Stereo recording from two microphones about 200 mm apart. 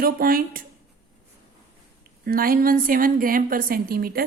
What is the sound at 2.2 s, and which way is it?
A woman's voice, 45° right (ahead or behind).